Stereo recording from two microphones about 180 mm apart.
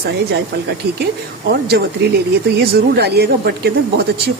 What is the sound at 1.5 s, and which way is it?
Speech, 65° right (ahead or behind).